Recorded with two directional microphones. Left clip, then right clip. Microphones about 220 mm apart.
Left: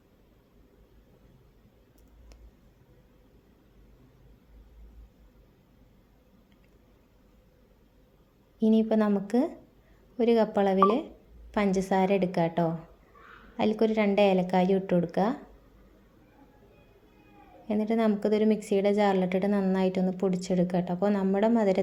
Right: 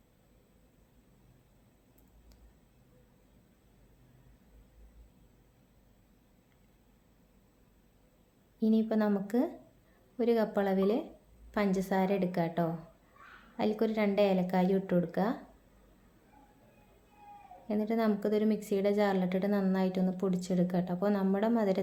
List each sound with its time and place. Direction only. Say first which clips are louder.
8.5 s a woman's voice: left 6 dB; 15° left (ahead or behind)
17.7 s a woman's voice: left 4 dB; 15° left (ahead or behind)